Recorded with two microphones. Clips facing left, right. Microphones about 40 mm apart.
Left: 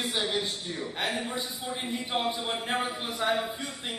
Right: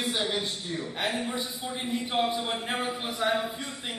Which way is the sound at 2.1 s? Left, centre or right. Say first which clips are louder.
Right 2 dB; centre.